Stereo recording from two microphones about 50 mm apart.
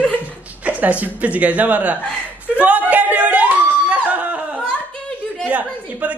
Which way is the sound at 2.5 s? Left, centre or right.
Right.